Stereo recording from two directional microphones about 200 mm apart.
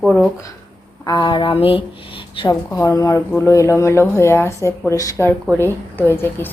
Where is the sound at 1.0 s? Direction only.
20° left (ahead or behind).